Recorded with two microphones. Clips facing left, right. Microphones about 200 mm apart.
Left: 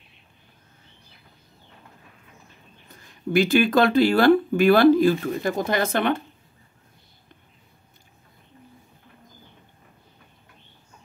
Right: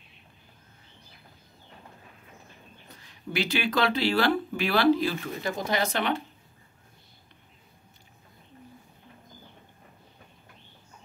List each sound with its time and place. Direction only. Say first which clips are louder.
3.0 s speech: left 10 dB; 50° left (ahead or behind)